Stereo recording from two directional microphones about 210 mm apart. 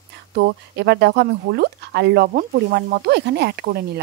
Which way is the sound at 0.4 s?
55° right (ahead or behind).